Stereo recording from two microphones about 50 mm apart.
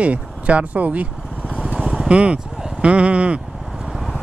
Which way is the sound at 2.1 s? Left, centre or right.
Right.